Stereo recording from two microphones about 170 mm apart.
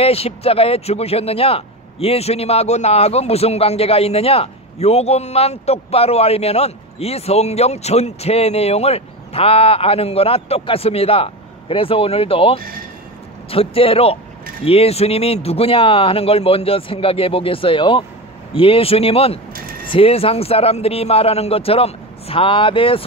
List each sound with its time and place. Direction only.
0.0 s speech: 35° left (ahead or behind)